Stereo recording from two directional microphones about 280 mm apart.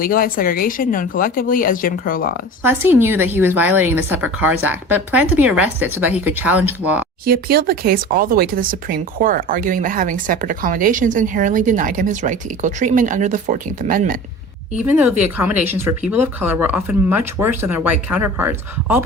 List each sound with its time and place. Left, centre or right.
0.0 s speech: left
2.6 s speech: centre
7.3 s speech: right
14.8 s speech: centre